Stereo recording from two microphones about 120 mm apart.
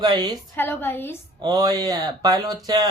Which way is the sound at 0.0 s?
35° right (ahead or behind).